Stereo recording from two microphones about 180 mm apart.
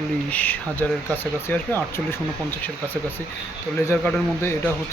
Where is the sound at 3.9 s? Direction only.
10° left (ahead or behind).